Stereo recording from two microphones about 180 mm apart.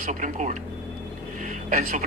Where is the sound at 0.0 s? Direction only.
45° right (ahead or behind).